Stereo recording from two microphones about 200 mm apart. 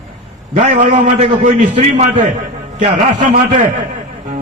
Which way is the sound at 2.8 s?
40° right (ahead or behind).